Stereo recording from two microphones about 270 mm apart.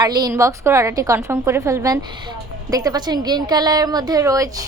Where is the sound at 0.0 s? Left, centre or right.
Centre.